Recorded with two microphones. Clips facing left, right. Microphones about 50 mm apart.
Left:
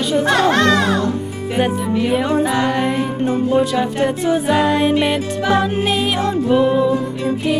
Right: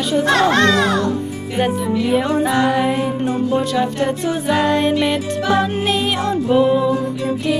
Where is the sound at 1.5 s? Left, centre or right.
Centre.